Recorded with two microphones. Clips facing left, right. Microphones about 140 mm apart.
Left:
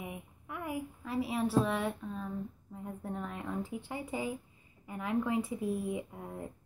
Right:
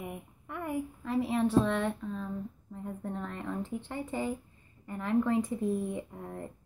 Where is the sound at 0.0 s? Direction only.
Centre (ahead or behind).